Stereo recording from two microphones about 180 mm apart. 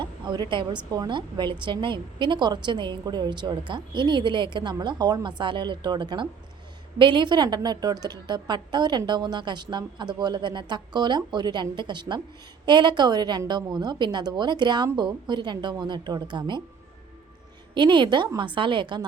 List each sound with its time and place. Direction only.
0.0 s a woman's voice: 25° right (ahead or behind)
17.7 s a woman's voice: 25° right (ahead or behind)